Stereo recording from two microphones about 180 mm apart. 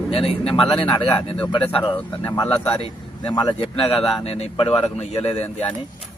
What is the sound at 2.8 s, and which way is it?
Speech, 20° left (ahead or behind).